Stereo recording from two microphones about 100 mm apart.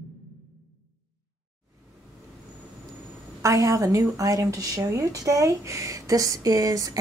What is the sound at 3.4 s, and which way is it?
A woman's voice, 35° right (ahead or behind).